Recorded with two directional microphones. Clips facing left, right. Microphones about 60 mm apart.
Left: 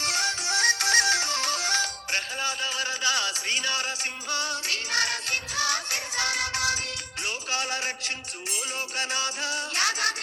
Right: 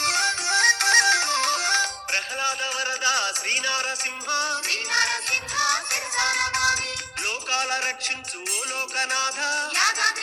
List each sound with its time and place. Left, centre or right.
0.0 s music: right